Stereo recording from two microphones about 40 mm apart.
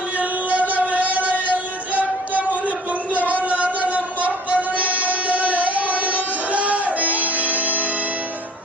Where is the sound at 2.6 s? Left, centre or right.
Right.